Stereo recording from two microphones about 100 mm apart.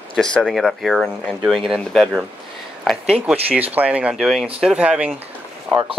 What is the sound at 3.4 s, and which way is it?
Speech, 15° right (ahead or behind).